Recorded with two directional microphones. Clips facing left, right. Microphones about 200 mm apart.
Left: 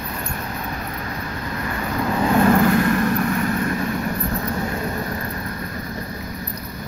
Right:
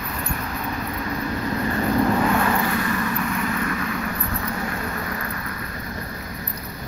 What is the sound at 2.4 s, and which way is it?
Vehicle, 50° left (ahead or behind).